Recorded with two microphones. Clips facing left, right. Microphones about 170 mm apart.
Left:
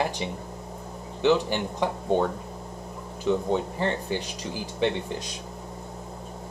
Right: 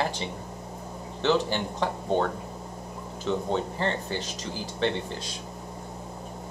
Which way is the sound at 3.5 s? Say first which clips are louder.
Left 1 dB; 10° left (ahead or behind).